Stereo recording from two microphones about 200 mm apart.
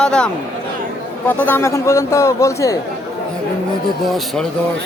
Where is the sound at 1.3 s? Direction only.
10° left (ahead or behind).